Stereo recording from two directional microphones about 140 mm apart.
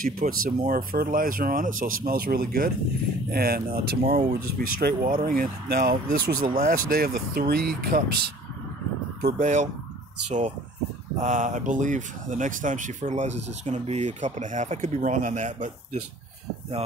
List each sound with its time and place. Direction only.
0.0 s speech: 90° right
0.7 s speech: 75° right (ahead or behind)
9.2 s speech: 65° right (ahead or behind)
11.1 s speech: 65° right (ahead or behind)